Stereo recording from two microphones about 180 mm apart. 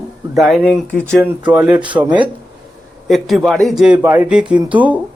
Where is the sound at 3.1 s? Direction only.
Centre (ahead or behind).